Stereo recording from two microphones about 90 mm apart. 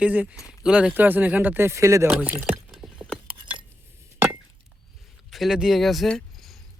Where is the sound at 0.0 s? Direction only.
15° right (ahead or behind); by 2.0 s 35° right (ahead or behind).